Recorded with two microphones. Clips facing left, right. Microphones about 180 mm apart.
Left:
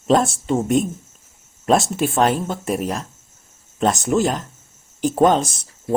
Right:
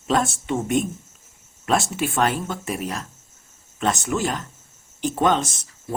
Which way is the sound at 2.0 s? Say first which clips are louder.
Left 4 dB; 40° left (ahead or behind).